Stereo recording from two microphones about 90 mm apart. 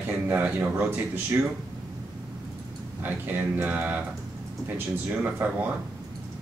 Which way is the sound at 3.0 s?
25° right (ahead or behind).